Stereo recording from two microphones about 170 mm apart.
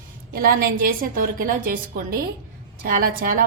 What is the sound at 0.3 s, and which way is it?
A woman's voice, 60° right (ahead or behind).